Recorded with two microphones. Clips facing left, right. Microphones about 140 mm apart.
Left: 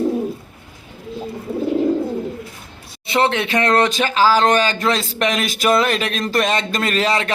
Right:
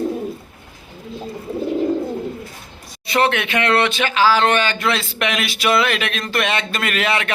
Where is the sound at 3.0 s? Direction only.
25° left (ahead or behind).